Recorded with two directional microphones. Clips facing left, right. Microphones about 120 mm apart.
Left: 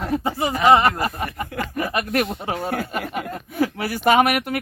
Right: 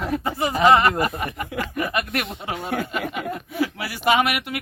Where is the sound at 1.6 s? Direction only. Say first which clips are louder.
Left 1 dB; 30° left (ahead or behind).